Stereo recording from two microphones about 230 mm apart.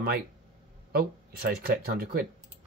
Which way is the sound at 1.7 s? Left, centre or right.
Right.